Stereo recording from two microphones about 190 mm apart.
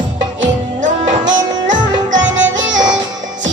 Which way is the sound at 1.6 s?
75° right (ahead or behind).